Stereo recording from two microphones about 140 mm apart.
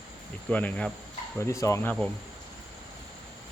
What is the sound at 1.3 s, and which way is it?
Speech, 20° left (ahead or behind).